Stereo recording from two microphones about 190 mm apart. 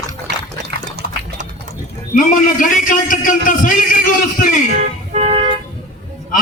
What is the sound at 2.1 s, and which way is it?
A man's voice, 45° left (ahead or behind).